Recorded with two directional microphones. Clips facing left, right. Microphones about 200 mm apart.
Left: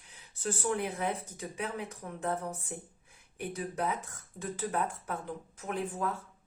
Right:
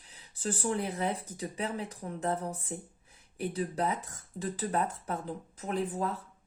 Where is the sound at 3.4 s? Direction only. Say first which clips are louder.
Right 3 dB; 35° right (ahead or behind).